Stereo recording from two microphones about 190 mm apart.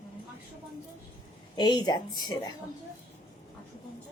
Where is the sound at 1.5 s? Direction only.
20° left (ahead or behind).